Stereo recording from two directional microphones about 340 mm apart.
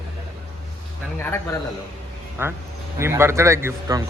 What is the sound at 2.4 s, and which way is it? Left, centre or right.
A man's voice, centre.